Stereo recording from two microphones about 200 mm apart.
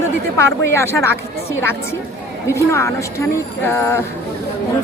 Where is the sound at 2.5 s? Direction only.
15° left (ahead or behind).